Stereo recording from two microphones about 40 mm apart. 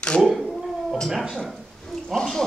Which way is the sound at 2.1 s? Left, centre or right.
Centre.